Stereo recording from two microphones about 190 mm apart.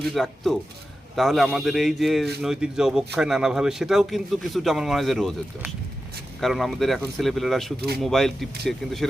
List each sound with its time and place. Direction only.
0.0 s speech: centre (ahead or behind)